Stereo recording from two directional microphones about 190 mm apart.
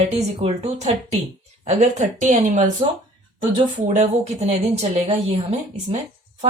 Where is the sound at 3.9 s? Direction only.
35° right (ahead or behind).